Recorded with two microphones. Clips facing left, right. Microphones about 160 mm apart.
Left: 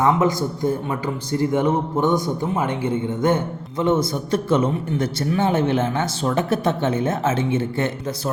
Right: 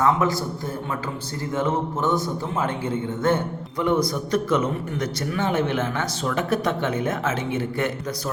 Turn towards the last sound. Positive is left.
turn(degrees=25)  # may be behind; listen again after turning